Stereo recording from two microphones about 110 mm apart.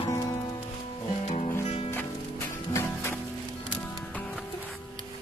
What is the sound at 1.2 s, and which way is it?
Music, 80° left.